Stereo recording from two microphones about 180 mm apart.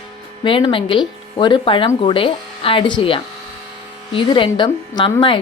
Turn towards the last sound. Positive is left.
turn(degrees=30)  # may be behind; listen again after turning